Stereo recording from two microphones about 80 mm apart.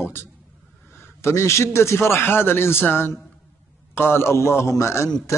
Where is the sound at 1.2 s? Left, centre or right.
Left.